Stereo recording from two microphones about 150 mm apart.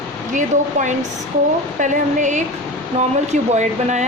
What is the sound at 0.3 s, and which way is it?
Speech, 55° right (ahead or behind).